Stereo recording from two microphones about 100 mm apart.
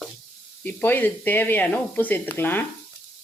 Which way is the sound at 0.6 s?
20° left (ahead or behind).